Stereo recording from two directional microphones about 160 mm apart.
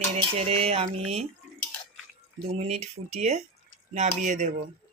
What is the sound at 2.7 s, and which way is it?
Speech, 40° right (ahead or behind).